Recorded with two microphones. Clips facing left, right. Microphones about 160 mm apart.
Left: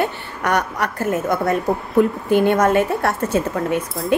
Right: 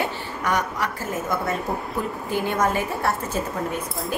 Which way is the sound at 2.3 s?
65° left (ahead or behind).